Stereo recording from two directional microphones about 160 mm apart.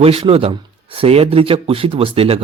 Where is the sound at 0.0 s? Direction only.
35° right (ahead or behind).